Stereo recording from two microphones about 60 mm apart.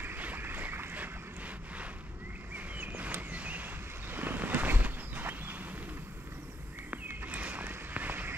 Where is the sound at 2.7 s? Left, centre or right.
Right.